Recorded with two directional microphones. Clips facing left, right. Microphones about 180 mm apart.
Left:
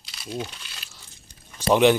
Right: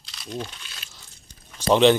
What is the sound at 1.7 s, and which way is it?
Speech, 10° left (ahead or behind).